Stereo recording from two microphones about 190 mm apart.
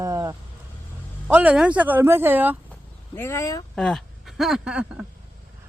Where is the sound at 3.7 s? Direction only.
5° left (ahead or behind).